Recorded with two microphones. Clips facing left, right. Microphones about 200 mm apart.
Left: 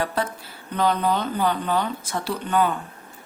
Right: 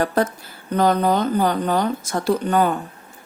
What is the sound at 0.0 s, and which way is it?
Speech, 45° right (ahead or behind).